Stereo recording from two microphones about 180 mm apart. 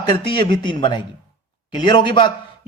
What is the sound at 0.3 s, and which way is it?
A man's voice, 25° left (ahead or behind).